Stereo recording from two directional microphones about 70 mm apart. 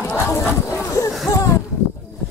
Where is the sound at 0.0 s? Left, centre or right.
Left.